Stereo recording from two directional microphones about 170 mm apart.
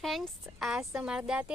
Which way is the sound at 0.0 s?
Centre (ahead or behind).